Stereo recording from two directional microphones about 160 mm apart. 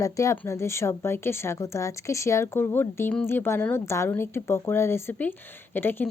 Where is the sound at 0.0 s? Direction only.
20° left (ahead or behind).